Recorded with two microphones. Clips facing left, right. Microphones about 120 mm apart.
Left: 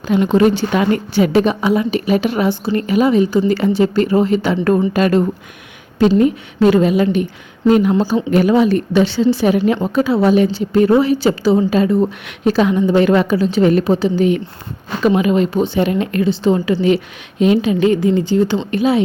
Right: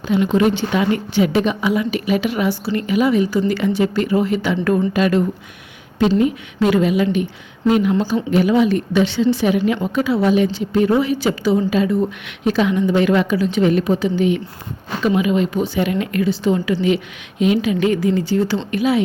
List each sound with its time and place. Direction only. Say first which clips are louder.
0.1 s a woman's voice: left 3 dB; 40° left (ahead or behind)
4.9 s a woman's voice: left 3 dB; 45° left (ahead or behind)
15.0 s speech: left 3 dB; 45° left (ahead or behind)
15.4 s a woman's voice: left 3 dB; 25° left (ahead or behind)